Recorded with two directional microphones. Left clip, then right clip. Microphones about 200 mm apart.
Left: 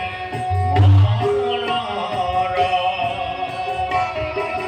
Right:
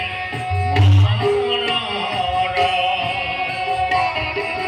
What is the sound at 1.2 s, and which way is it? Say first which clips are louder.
Music: right 1 dB; 50° left (ahead or behind).